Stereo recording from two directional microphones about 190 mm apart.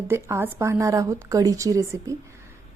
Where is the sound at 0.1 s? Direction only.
15° right (ahead or behind).